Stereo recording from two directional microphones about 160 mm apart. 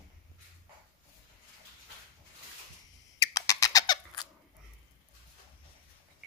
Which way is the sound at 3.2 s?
20° left (ahead or behind).